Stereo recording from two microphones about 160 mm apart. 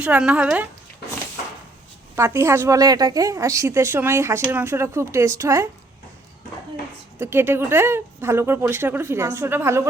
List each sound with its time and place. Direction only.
0.0 s a woman's voice: 5° right (ahead or behind)
2.1 s a woman's voice: 15° right (ahead or behind)
7.2 s a woman's voice: 15° right (ahead or behind)